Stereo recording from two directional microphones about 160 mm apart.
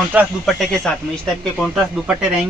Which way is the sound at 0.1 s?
10° right (ahead or behind).